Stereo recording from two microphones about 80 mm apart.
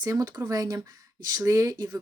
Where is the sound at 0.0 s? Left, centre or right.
Right.